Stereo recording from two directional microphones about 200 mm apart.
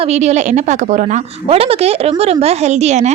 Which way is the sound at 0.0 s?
35° right (ahead or behind).